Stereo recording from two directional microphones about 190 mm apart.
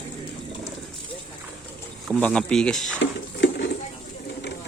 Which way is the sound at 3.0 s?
70° left (ahead or behind).